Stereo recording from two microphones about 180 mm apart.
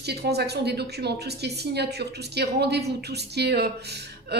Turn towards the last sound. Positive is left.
turn(degrees=-65)  # may be behind; listen again after turning